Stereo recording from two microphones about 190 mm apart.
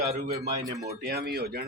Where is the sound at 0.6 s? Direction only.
20° right (ahead or behind).